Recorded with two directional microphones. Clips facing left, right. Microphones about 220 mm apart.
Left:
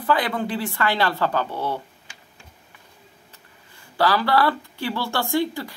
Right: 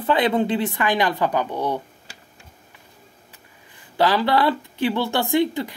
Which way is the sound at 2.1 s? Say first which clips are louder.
Right 4 dB; 35° right (ahead or behind).